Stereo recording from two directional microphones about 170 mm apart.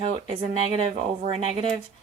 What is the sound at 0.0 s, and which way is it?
Speech, 35° right (ahead or behind).